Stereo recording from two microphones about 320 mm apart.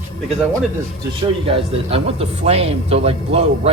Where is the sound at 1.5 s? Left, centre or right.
Centre.